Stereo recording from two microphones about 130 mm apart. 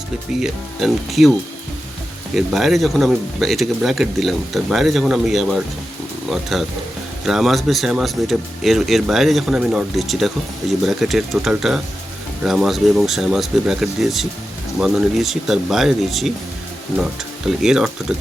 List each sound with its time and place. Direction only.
0.3 s speech: centre (ahead or behind)
2.3 s speech: centre (ahead or behind)
17.6 s speech: 5° right (ahead or behind)